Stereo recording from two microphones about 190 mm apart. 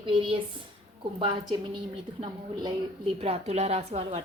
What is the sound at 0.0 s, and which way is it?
A woman's voice, 25° right (ahead or behind).